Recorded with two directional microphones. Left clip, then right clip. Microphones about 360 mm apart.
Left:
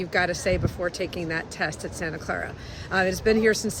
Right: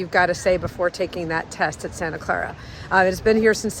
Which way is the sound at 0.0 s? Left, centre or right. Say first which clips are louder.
Right 6 dB; centre.